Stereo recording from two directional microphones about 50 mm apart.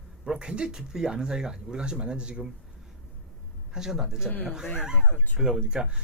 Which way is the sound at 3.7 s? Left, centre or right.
Centre.